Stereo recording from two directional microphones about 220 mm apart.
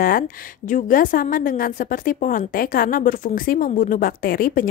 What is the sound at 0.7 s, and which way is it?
Speech, 35° left (ahead or behind).